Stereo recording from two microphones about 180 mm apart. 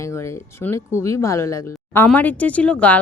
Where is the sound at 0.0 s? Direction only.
15° left (ahead or behind).